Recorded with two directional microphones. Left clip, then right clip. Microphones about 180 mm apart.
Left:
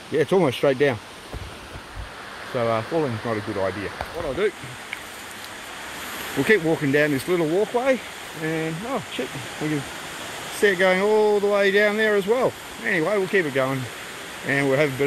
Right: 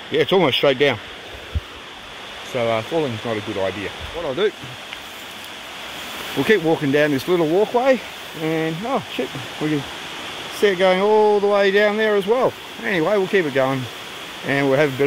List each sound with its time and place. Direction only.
0.1 s speech: 5° right (ahead or behind)
2.5 s speech: 5° right (ahead or behind)
6.4 s speech: 15° right (ahead or behind)
10.6 s speech: 15° right (ahead or behind)
12.8 s speech: 25° right (ahead or behind)